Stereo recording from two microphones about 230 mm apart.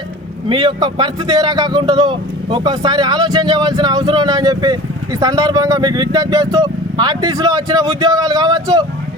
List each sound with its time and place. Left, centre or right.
0.4 s a man's voice: right